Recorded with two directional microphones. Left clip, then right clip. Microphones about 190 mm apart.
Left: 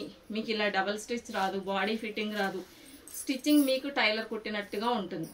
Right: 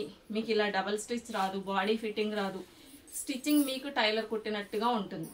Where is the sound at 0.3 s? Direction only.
25° right (ahead or behind).